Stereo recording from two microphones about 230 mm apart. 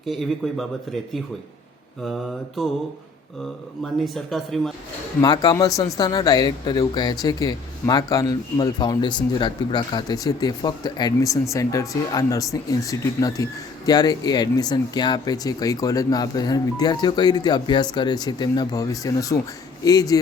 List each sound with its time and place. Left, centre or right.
0.0 s speech: centre
2.6 s speech: centre
4.0 s speech: centre
5.2 s speech: centre